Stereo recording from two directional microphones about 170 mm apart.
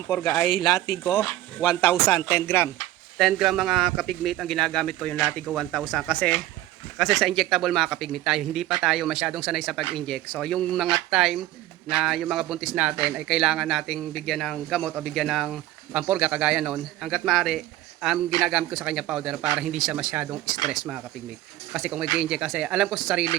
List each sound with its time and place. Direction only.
0.1 s speech: 10° left (ahead or behind)
3.2 s a man's voice: centre (ahead or behind)